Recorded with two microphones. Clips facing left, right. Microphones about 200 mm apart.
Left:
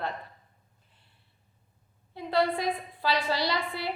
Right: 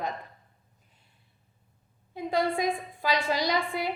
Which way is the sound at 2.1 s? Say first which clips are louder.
Even; 15° right (ahead or behind).